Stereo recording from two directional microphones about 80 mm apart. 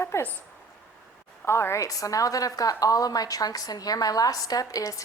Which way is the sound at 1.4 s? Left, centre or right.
Left.